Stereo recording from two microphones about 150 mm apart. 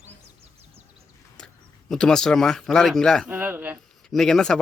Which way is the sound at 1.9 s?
5° left (ahead or behind).